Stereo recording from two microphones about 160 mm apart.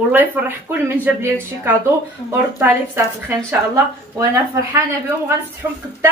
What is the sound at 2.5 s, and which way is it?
A woman's voice, 15° right (ahead or behind).